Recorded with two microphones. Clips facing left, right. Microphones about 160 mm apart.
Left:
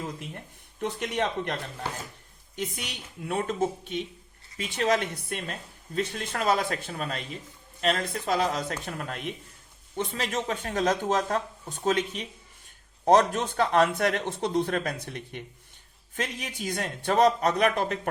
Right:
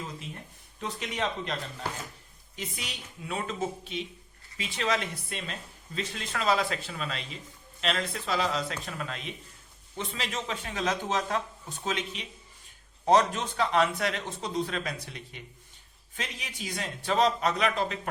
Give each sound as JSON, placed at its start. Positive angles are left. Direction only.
{"t": 0.8, "sound": "speech", "side_deg": 55}
{"t": 2.6, "sound": "speech", "side_deg": 55}